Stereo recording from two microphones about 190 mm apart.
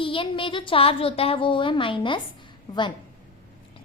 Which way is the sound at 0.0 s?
25° left (ahead or behind).